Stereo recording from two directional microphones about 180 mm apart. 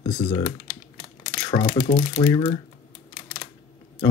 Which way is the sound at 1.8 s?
40° left (ahead or behind).